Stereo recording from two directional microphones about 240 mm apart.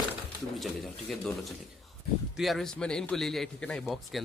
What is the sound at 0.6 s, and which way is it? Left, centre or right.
A man's voice, centre.